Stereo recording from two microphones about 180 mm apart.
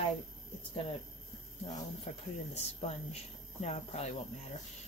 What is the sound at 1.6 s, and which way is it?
Speech, 30° left (ahead or behind).